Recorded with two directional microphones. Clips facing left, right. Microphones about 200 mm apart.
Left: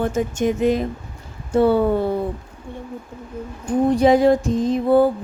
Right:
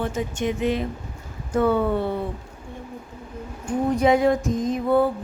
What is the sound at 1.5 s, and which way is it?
Speech, 30° left (ahead or behind).